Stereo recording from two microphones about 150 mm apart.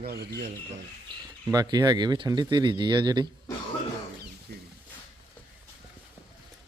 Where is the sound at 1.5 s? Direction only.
25° right (ahead or behind).